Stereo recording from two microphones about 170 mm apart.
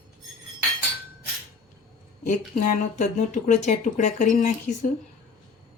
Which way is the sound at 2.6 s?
50° left (ahead or behind).